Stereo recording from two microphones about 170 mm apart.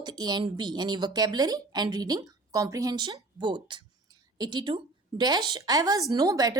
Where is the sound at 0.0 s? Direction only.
25° right (ahead or behind).